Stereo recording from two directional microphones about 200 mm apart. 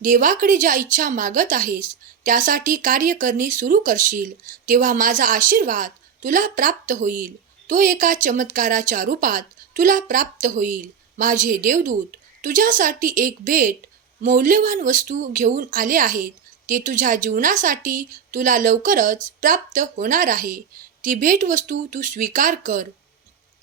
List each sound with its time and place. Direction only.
0.0 s speech: 40° right (ahead or behind)